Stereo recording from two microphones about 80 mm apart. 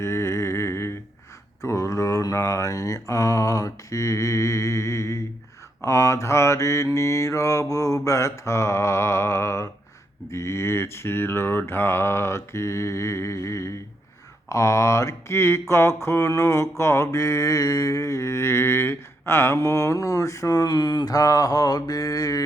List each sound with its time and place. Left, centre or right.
0.0 s humming: left
1.6 s mantra: left